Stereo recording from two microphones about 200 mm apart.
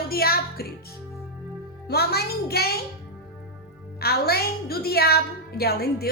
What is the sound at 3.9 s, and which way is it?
A woman's voice, 50° left (ahead or behind).